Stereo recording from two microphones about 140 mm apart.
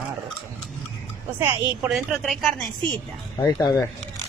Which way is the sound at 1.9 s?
Centre (ahead or behind).